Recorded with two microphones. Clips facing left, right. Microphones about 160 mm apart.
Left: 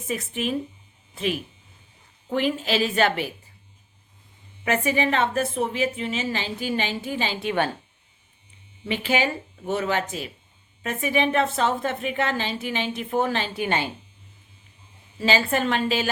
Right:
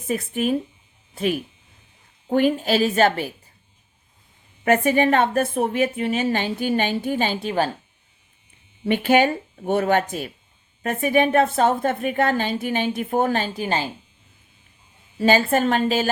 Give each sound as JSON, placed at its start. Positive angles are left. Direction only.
{"t": 0.1, "sound": "a woman's voice", "side_deg": -45}
{"t": 2.3, "sound": "a woman's voice", "side_deg": -50}
{"t": 4.6, "sound": "a woman's voice", "side_deg": -50}
{"t": 8.9, "sound": "a woman's voice", "side_deg": -55}
{"t": 13.6, "sound": "a woman's voice", "side_deg": -35}
{"t": 15.2, "sound": "a woman's voice", "side_deg": -50}